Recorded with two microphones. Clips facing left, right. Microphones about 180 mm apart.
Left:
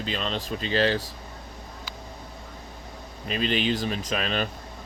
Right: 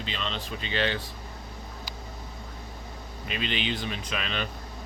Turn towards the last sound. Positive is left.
turn(degrees=40)  # may be behind; listen again after turning